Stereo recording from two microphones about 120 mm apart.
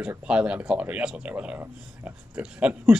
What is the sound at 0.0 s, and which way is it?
Speech, 10° right (ahead or behind).